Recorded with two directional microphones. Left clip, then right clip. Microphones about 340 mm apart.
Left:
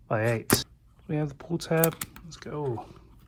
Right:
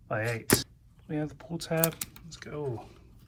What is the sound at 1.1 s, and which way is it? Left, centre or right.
Speech, centre.